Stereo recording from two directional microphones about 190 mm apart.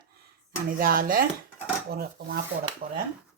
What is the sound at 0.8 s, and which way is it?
Dishes, 50° right (ahead or behind).